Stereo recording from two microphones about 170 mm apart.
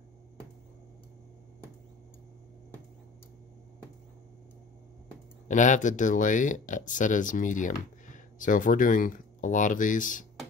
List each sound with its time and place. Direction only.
5.5 s speech: 45° left (ahead or behind)